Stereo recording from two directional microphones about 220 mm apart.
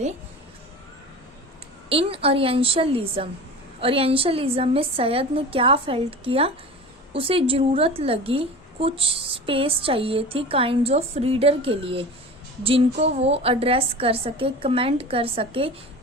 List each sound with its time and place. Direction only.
1.9 s a woman's voice: 25° right (ahead or behind)